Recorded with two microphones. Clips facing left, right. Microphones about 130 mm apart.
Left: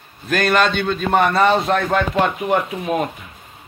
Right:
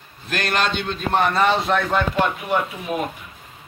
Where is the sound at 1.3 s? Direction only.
40° left (ahead or behind).